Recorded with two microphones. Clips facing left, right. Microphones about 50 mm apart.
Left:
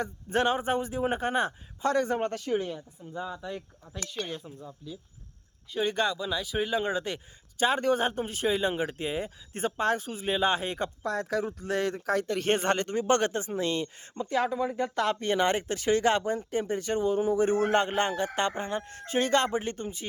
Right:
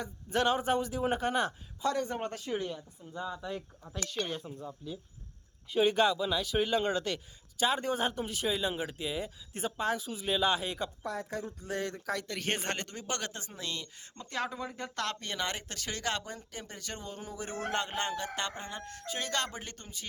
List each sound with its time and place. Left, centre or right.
0.0 s speech: left
1.8 s speech: left
2.6 s speech: centre
3.4 s speech: centre
7.6 s speech: left
8.0 s a man's voice: left
11.0 s speech: left
12.5 s speech: left
14.2 s speech: centre
15.2 s speech: left